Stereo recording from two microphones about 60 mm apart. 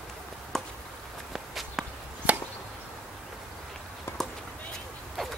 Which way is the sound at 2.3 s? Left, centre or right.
Right.